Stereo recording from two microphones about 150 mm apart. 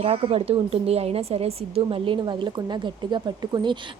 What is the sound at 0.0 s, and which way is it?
A woman's voice, 40° right (ahead or behind).